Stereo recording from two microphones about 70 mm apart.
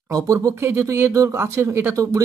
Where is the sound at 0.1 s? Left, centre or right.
Right.